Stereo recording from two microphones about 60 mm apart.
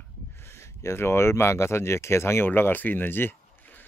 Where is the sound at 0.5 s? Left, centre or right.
Left.